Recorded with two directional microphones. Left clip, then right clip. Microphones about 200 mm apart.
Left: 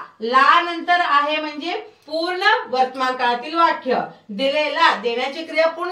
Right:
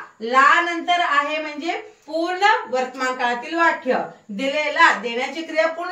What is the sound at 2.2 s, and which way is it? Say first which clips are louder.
Speech: even; 15° left (ahead or behind).